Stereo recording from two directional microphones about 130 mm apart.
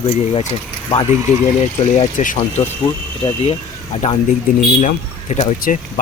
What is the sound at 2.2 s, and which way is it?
Speech, 65° left (ahead or behind).